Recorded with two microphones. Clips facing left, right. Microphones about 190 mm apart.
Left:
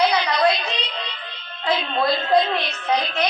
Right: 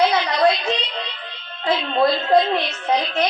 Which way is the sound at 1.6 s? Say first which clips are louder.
Right 3 dB; 25° right (ahead or behind).